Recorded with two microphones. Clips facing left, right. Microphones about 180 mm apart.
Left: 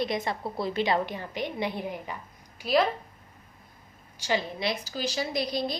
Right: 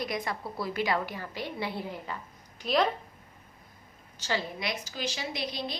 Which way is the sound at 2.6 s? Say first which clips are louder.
Left 2 dB; centre (ahead or behind).